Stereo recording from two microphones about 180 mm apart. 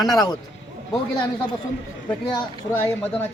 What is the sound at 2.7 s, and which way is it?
Speech, 10° left (ahead or behind).